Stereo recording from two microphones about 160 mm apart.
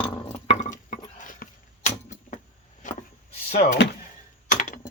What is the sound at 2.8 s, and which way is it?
Wood, 55° left (ahead or behind).